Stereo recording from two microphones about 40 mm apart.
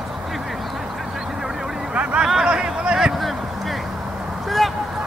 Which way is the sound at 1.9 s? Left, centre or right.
Right.